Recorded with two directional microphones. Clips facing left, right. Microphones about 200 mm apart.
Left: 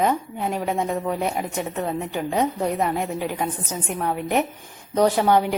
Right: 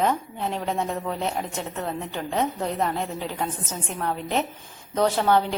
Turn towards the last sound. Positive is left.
turn(degrees=15)  # may be behind; listen again after turning